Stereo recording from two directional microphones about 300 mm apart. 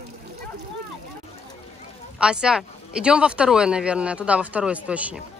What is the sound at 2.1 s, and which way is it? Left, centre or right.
Speech, centre.